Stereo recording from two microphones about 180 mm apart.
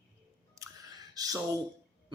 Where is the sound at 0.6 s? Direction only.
15° right (ahead or behind).